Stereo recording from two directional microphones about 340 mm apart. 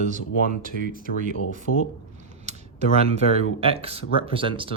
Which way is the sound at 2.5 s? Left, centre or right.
Centre.